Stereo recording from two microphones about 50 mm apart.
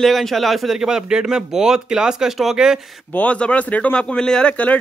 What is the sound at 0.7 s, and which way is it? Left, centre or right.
Speech, centre.